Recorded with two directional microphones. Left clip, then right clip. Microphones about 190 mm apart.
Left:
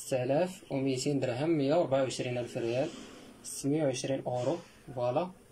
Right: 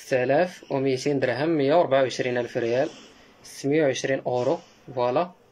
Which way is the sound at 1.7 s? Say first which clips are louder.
Right 10 dB; 15° left (ahead or behind).